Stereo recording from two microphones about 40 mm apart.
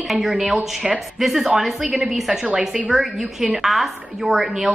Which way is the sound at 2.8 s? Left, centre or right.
Centre.